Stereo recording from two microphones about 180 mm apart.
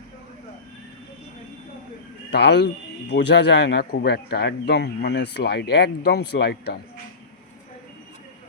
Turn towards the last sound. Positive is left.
turn(degrees=65)  # may be behind; listen again after turning